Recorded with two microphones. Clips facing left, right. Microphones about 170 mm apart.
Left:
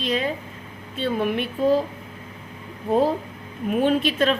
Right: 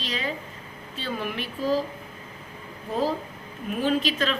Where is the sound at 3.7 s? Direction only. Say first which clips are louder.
Left 4 dB; 55° left (ahead or behind).